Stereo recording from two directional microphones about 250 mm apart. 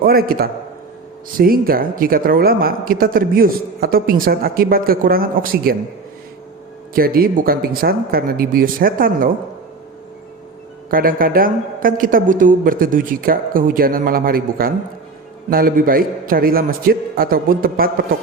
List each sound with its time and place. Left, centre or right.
0.0 s a woman's voice: right
6.9 s a woman's voice: right
10.9 s a woman's voice: right